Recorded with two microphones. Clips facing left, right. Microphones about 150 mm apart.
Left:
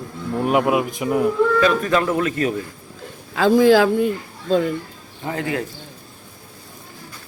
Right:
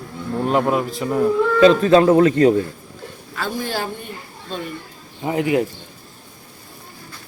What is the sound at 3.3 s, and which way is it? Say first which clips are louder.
Speech: left 12 dB; 90° left.